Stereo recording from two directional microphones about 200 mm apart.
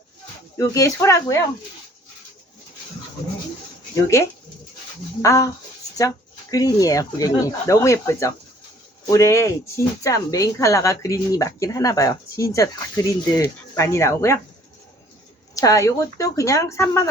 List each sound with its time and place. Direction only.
0.5 s speech: 15° left (ahead or behind)
3.9 s speech: 15° left (ahead or behind)
15.5 s speech: 15° left (ahead or behind)